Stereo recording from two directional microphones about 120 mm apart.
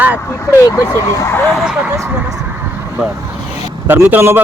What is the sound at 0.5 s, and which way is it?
Speech, 25° left (ahead or behind).